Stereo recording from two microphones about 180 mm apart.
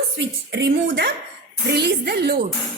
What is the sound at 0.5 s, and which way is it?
A woman's voice, 70° right (ahead or behind).